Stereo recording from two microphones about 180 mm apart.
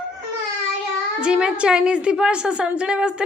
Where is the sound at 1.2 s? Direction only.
5° right (ahead or behind).